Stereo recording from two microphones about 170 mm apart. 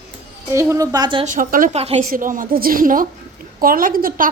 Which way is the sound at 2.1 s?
55° right (ahead or behind).